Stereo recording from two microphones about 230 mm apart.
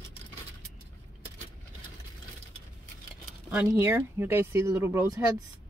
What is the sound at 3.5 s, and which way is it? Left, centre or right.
Speech, centre.